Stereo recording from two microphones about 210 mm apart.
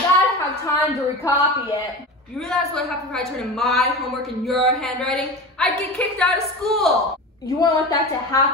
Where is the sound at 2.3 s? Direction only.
Centre (ahead or behind).